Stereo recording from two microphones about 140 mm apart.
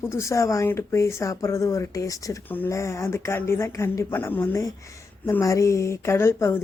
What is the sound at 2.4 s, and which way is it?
Speech, 15° left (ahead or behind).